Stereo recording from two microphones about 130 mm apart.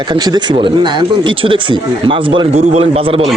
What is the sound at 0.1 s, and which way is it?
A man's voice, 30° right (ahead or behind).